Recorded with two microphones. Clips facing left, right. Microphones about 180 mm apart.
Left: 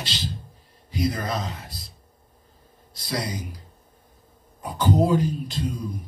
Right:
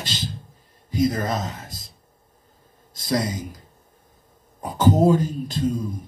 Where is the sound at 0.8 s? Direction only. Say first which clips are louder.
Right 4 dB; 45° right (ahead or behind).